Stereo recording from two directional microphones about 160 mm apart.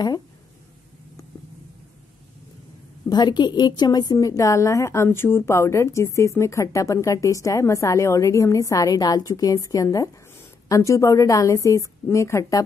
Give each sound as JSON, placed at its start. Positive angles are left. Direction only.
{"t": 3.1, "sound": "a woman's voice", "side_deg": 25}